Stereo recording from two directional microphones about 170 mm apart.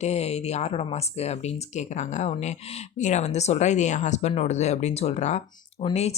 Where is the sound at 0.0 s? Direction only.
40° left (ahead or behind).